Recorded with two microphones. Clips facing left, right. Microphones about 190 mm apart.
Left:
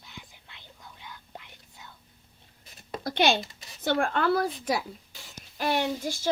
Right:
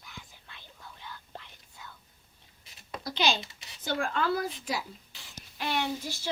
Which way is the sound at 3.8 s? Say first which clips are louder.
Left 5 dB; 60° left (ahead or behind).